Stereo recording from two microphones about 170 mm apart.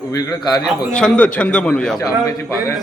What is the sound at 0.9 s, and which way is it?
A man's voice, 5° left (ahead or behind).